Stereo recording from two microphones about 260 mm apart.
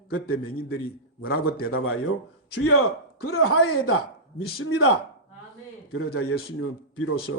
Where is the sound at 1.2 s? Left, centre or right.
Left.